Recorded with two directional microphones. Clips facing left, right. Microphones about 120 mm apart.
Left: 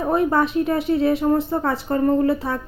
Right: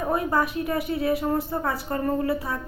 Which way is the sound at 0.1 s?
25° left (ahead or behind).